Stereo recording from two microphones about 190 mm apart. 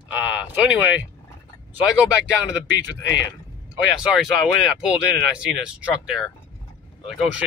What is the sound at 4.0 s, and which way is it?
Speech, 5° right (ahead or behind).